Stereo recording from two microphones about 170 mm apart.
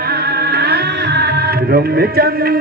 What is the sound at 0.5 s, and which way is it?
Music, 75° right (ahead or behind).